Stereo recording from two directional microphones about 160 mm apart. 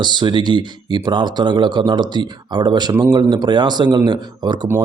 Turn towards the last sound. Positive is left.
turn(degrees=-25)  # may be behind; listen again after turning